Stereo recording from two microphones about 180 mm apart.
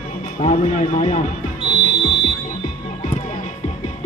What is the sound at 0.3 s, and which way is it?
Speech, 45° left (ahead or behind).